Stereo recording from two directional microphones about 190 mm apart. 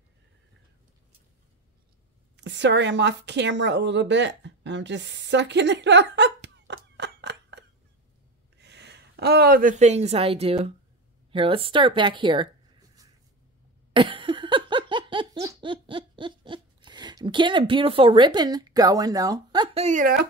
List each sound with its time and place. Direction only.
2.3 s a woman's voice: 65° right (ahead or behind); by 12.4 s 25° right (ahead or behind)
13.9 s laughter: 25° right (ahead or behind)
19.8 s speech: 45° right (ahead or behind)